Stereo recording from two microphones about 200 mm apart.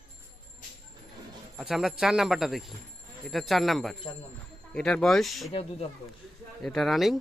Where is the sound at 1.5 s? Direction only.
Centre (ahead or behind).